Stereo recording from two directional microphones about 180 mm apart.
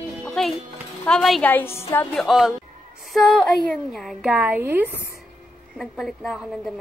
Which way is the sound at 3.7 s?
Centre (ahead or behind).